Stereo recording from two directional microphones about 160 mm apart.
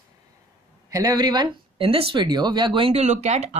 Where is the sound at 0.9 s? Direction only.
25° right (ahead or behind).